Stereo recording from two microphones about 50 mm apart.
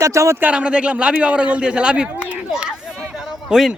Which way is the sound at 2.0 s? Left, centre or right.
Right.